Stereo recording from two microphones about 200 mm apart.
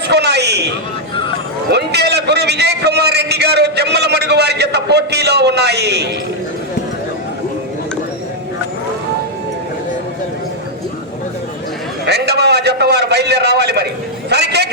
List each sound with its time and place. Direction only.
0.1 s a man's voice: 55° right (ahead or behind)
1.7 s a man's voice: 55° right (ahead or behind)
12.0 s a man's voice: 55° right (ahead or behind)